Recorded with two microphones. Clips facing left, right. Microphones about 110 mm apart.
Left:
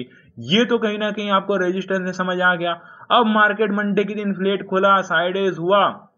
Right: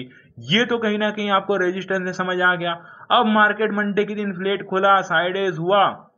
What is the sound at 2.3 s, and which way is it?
Speech, 35° left (ahead or behind).